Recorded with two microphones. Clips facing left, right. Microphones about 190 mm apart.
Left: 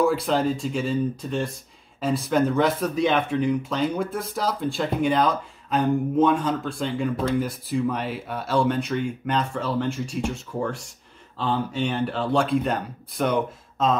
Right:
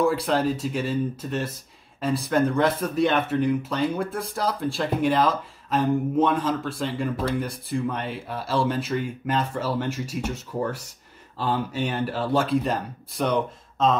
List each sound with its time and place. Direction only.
0.0 s speech: centre (ahead or behind)